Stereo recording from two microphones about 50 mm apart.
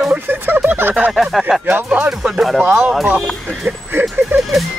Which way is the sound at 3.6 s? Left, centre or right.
Right.